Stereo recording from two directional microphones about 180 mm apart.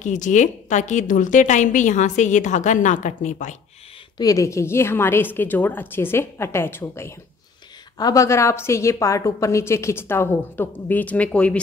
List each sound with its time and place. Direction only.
0.0 s a woman's voice: 45° left (ahead or behind)
4.2 s a woman's voice: 20° left (ahead or behind)